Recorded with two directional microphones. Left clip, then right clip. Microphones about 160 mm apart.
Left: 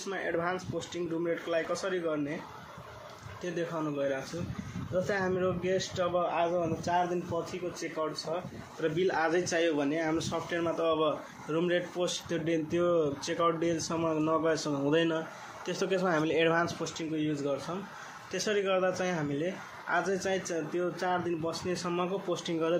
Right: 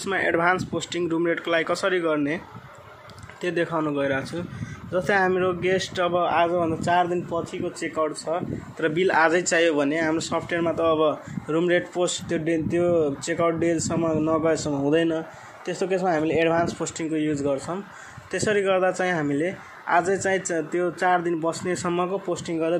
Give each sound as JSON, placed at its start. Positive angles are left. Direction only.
{"t": 0.0, "sound": "speech", "side_deg": -80}
{"t": 3.4, "sound": "speech", "side_deg": -80}
{"t": 8.3, "sound": "a man's voice", "side_deg": -65}
{"t": 16.8, "sound": "a man's voice", "side_deg": -55}